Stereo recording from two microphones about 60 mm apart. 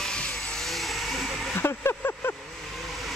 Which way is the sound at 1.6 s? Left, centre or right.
Left.